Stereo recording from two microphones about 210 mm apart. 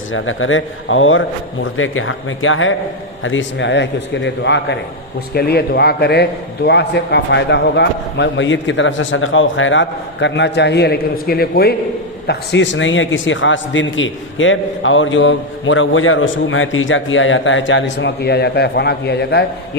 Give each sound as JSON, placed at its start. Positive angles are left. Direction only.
{"t": 0.1, "sound": "a man's voice", "side_deg": 70}